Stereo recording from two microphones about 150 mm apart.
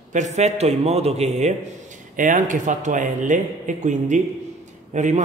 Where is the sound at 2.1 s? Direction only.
60° right (ahead or behind).